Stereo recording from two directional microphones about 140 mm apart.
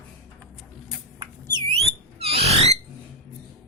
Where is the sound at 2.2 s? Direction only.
45° right (ahead or behind).